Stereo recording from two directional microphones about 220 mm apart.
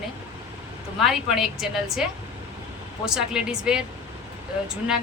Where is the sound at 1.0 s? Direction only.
Centre (ahead or behind).